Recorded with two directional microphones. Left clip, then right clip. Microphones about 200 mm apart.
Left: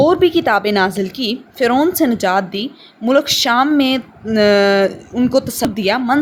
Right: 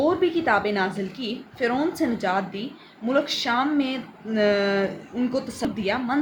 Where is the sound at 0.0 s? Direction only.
50° left (ahead or behind).